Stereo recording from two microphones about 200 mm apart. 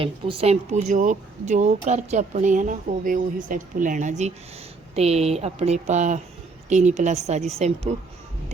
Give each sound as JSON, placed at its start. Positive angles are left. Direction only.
{"t": 0.0, "sound": "speech", "side_deg": -25}